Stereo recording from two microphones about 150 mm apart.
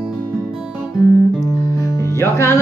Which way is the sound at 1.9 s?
20° left (ahead or behind).